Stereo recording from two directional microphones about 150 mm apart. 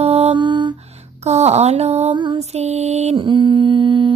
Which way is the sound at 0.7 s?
45° right (ahead or behind).